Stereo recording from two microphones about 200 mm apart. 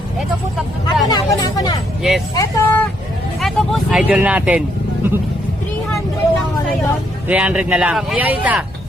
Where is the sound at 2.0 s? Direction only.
Centre (ahead or behind).